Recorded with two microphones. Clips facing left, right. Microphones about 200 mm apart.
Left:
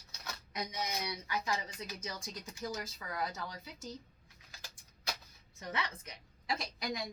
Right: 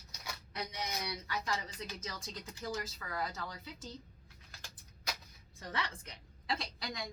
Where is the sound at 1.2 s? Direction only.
15° left (ahead or behind).